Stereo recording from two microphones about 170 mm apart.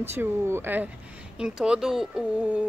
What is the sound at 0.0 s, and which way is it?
Speech, 15° right (ahead or behind).